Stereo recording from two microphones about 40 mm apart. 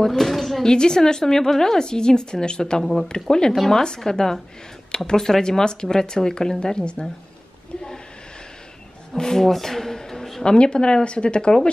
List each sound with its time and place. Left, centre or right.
0.2 s a woman's voice: centre
0.7 s a woman's voice: centre
2.8 s a woman's voice: centre
3.3 s a woman's voice: centre
9.1 s a sound: centre
10.4 s speech: left